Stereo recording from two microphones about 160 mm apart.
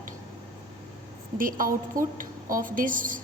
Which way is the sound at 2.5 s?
60° right (ahead or behind).